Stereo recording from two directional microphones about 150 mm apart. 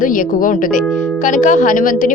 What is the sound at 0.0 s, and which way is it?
A woman's voice, 65° left (ahead or behind).